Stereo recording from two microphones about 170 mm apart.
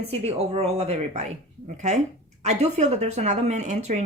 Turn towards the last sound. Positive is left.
turn(degrees=-45)  # may be behind; listen again after turning